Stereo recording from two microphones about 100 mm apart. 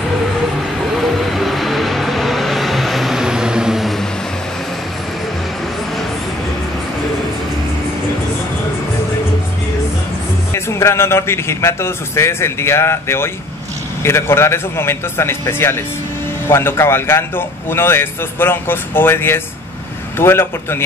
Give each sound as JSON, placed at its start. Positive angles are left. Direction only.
{"t": 1.0, "sound": "vehicle", "side_deg": 0}
{"t": 10.5, "sound": "a man's voice", "side_deg": 30}